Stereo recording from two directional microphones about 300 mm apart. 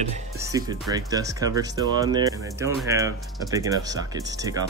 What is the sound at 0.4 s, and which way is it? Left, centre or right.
Speech, centre.